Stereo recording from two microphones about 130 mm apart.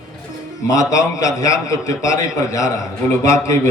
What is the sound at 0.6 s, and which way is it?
A man's voice, 25° left (ahead or behind).